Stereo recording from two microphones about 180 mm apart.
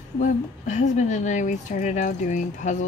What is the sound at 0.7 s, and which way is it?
Speech, 40° left (ahead or behind).